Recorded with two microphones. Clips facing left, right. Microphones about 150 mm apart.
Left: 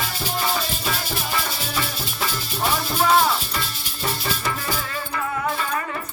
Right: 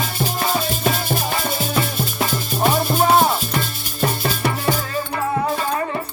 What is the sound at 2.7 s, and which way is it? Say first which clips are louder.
Music: right 2 dB; 35° right (ahead or behind).